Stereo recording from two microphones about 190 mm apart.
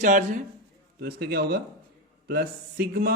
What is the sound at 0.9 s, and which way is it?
A man's voice, 55° right (ahead or behind).